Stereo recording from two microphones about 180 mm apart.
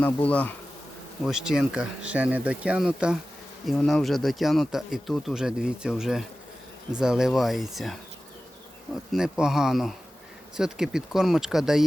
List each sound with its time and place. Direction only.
0.0 s bee: 10° left (ahead or behind)
1.2 s speech: 5° right (ahead or behind)